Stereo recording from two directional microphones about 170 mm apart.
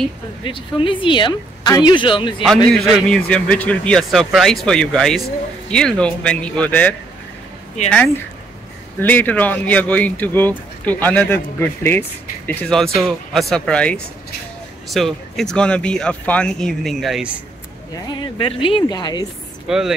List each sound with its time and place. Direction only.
0.4 s speech: 30° left (ahead or behind)
2.7 s speech: 5° left (ahead or behind)
9.0 s speech: 10° left (ahead or behind)
18.2 s speech: 30° left (ahead or behind)
19.7 s speech: 5° right (ahead or behind)